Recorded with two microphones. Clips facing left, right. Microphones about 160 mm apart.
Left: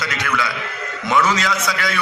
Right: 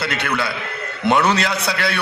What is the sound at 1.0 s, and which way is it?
Speech, 65° right (ahead or behind).